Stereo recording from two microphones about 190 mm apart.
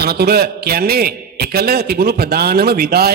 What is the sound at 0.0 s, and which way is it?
A man's voice, 55° right (ahead or behind).